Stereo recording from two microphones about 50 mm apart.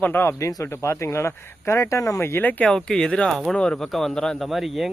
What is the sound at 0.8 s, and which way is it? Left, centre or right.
Speech, left.